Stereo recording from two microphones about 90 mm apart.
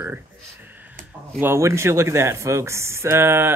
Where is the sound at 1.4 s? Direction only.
30° right (ahead or behind).